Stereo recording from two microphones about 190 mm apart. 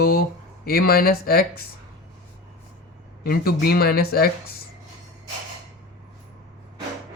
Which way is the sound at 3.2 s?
55° left (ahead or behind).